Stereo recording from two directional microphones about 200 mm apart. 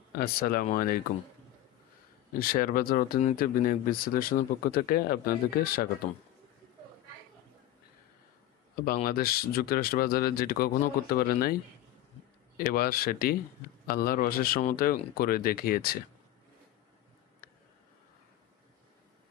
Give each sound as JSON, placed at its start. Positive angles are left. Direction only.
{"t": 0.2, "sound": "speech", "side_deg": 45}
{"t": 2.3, "sound": "speech", "side_deg": 45}
{"t": 8.8, "sound": "speech", "side_deg": 45}
{"t": 12.5, "sound": "speech", "side_deg": 45}